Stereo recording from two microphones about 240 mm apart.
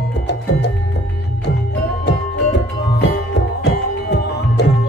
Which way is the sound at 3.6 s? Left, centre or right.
Left.